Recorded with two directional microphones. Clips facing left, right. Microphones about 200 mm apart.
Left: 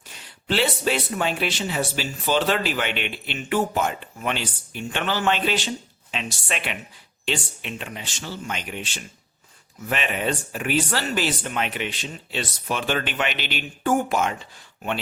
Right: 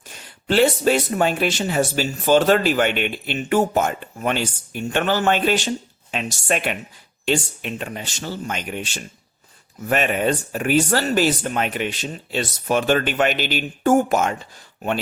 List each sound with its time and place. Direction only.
0.1 s speech: 45° right (ahead or behind)